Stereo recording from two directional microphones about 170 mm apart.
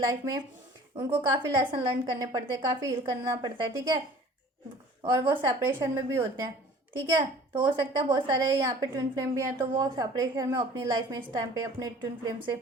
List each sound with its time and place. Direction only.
0.0 s a woman's voice: 20° right (ahead or behind)
5.0 s a woman's voice: 20° right (ahead or behind)
7.2 s a woman's voice: 25° right (ahead or behind)